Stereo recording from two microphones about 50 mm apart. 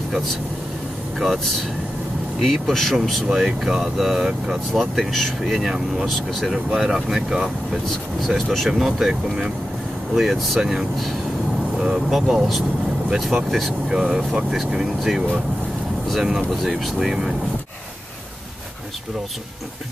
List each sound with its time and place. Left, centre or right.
1.1 s speech: centre
17.1 s speech: centre